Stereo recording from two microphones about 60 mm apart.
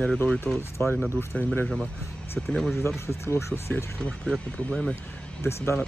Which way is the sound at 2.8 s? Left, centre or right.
Left.